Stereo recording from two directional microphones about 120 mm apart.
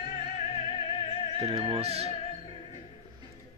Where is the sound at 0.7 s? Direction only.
50° left (ahead or behind).